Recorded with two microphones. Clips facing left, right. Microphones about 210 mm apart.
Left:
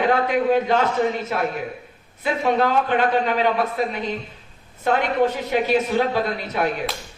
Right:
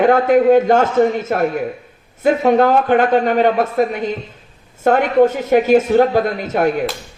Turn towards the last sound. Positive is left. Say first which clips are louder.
# right 6 dB
turn(degrees=-50)  # may be behind; listen again after turning